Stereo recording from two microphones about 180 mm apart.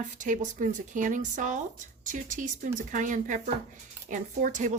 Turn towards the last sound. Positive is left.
turn(degrees=-45)  # may be behind; listen again after turning